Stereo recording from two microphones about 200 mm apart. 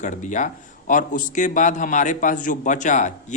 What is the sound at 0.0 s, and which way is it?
Speech, 40° left (ahead or behind).